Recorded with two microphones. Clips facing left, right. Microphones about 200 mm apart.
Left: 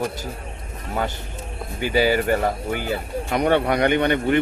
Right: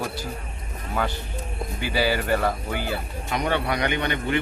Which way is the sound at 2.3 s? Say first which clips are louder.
Left 3 dB; 50° left (ahead or behind).